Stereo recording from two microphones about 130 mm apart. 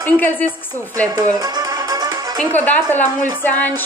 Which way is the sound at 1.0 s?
30° right (ahead or behind).